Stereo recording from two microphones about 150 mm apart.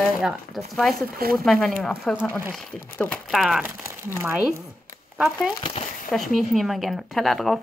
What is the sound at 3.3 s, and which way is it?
Speech, centre (ahead or behind).